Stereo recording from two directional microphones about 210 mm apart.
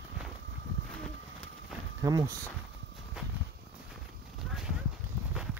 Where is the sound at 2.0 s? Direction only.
15° right (ahead or behind).